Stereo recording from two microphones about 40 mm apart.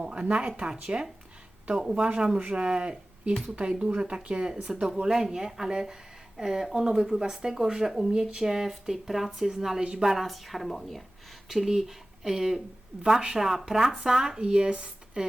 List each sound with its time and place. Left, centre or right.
0.0 s speech: right
1.7 s speech: centre
2.0 s speech: right
4.6 s speech: centre
8.1 s a woman's voice: centre
11.4 s speech: centre